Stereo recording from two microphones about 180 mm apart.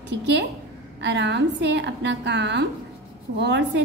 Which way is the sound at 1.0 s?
75° right (ahead or behind).